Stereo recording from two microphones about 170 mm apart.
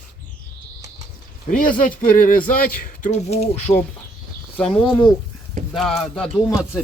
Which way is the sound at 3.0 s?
40° left (ahead or behind).